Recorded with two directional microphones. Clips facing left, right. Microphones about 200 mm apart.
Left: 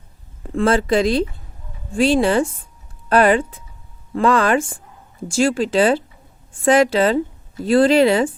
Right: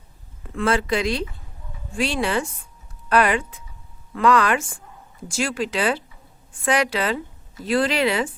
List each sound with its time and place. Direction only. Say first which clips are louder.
0.4 s speech: left 5 dB; 30° left (ahead or behind)